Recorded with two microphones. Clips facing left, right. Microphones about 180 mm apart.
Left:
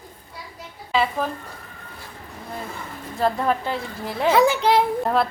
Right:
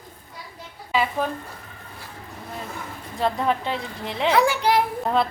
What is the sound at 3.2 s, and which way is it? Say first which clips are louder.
A woman's voice: left 1 dB; centre (ahead or behind).